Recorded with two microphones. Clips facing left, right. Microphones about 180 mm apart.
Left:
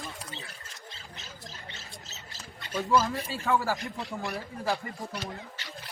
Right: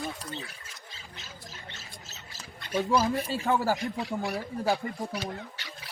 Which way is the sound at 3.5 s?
35° right (ahead or behind).